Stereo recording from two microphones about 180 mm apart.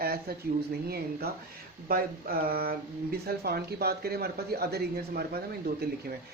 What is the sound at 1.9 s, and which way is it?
Speech, 55° right (ahead or behind).